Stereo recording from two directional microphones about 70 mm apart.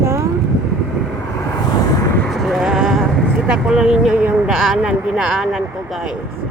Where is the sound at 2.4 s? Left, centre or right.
Centre.